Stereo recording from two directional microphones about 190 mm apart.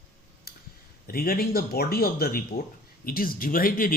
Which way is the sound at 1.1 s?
50° left (ahead or behind).